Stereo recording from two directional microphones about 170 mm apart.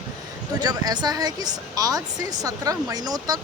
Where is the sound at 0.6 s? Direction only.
25° right (ahead or behind).